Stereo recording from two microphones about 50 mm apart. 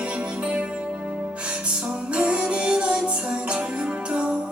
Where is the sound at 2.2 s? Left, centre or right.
Right.